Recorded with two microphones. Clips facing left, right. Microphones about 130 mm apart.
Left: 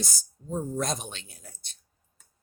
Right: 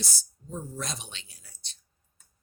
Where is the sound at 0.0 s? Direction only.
45° left (ahead or behind).